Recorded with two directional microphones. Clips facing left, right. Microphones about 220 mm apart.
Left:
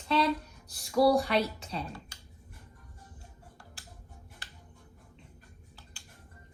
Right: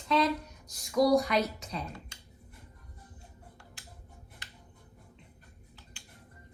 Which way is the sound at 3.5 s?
35° left (ahead or behind).